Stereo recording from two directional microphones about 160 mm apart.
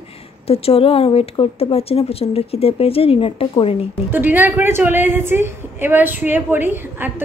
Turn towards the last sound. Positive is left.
turn(degrees=-15)  # may be behind; listen again after turning